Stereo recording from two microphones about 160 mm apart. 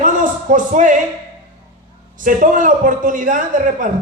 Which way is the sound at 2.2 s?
55° right (ahead or behind).